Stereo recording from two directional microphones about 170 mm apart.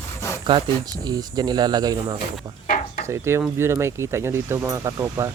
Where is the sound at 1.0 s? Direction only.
25° right (ahead or behind).